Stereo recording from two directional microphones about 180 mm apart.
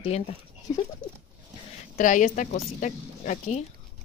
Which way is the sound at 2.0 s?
45° left (ahead or behind).